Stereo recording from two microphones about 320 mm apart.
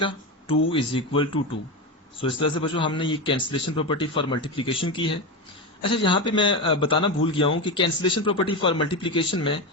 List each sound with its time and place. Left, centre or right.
0.7 s a man's voice: centre